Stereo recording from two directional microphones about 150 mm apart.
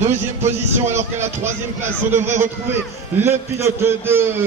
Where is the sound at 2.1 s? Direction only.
15° right (ahead or behind).